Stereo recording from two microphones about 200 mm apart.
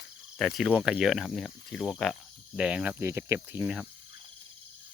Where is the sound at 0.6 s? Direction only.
5° right (ahead or behind).